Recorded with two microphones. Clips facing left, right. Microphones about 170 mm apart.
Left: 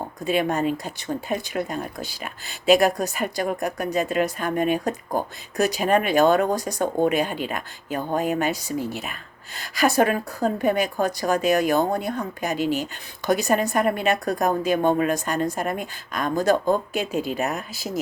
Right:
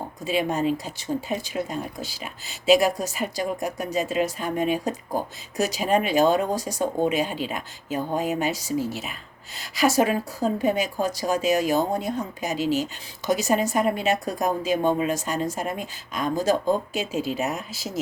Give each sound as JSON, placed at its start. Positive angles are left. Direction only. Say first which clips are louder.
{"t": 0.3, "sound": "a woman's voice", "louder": "left 1 dB", "side_deg": 55}